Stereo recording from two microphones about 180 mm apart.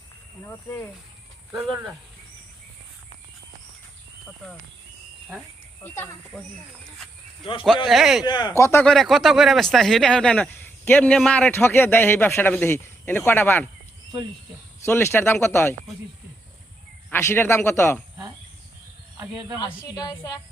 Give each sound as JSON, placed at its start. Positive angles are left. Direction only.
{"t": 0.4, "sound": "speech", "side_deg": 15}
{"t": 5.8, "sound": "speech", "side_deg": 15}
{"t": 7.9, "sound": "speech", "side_deg": 0}
{"t": 8.2, "sound": "a woman's voice", "side_deg": 25}
{"t": 8.9, "sound": "speech", "side_deg": 0}
{"t": 14.8, "sound": "speech", "side_deg": 15}
{"t": 17.1, "sound": "speech", "side_deg": 15}
{"t": 19.5, "sound": "a woman's voice", "side_deg": 20}